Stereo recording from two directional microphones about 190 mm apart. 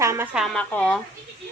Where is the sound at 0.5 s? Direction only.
5° left (ahead or behind).